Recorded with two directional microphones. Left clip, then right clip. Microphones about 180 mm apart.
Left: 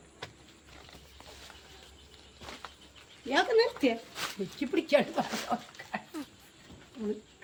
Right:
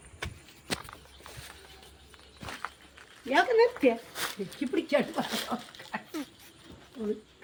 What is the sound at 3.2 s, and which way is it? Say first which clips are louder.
Speech: right 3 dB; 25° left (ahead or behind).